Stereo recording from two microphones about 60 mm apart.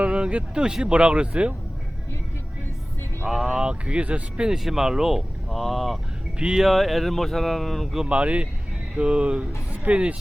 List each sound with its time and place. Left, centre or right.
0.0 s speech: centre
3.2 s speech: centre
8.0 s speech: right